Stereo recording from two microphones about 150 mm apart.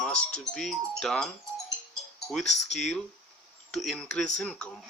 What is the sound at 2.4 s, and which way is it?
Speech, 50° left (ahead or behind).